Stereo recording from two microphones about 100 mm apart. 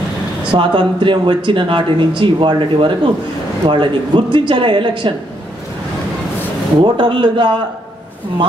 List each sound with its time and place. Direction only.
0.5 s speech: 55° right (ahead or behind)
6.8 s a man's voice: 50° right (ahead or behind)